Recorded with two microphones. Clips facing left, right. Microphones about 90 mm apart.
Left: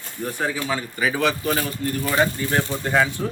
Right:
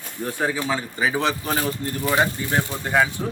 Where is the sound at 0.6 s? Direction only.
10° right (ahead or behind).